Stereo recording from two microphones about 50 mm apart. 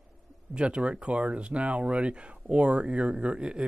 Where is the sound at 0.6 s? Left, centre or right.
Right.